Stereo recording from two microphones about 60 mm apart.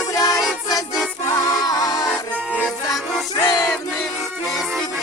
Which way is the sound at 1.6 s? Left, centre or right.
Left.